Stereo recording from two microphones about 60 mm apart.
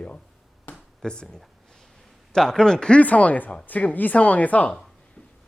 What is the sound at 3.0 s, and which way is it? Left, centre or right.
Speech, left.